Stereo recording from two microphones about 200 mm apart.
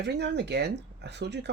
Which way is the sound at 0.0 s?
60° right (ahead or behind).